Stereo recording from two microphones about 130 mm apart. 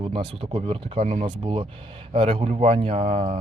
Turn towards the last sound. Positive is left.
turn(degrees=-55)  # may be behind; listen again after turning